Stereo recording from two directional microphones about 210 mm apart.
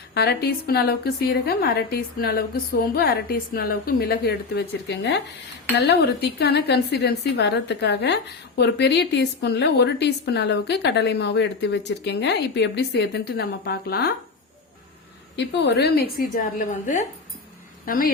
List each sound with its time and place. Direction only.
0.1 s a woman's voice: 50° left (ahead or behind)
15.4 s a woman's voice: 55° left (ahead or behind)